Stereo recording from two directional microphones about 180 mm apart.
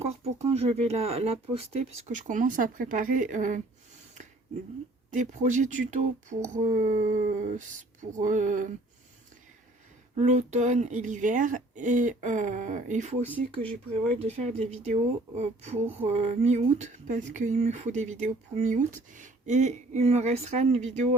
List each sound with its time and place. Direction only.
0.0 s speech: 35° right (ahead or behind)
5.1 s speech: 45° right (ahead or behind)
10.2 s speech: 40° right (ahead or behind)